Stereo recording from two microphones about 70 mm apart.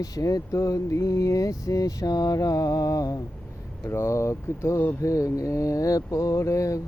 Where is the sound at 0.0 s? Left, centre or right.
Left.